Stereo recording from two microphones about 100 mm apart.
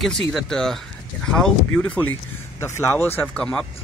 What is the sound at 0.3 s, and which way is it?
Speech, centre (ahead or behind).